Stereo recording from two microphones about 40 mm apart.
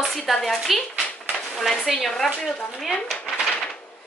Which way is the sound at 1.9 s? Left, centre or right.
Centre.